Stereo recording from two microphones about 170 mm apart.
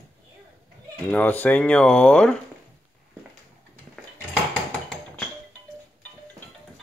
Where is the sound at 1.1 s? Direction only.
10° left (ahead or behind).